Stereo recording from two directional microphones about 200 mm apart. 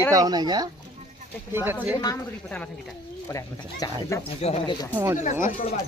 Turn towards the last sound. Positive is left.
turn(degrees=40)  # may be behind; listen again after turning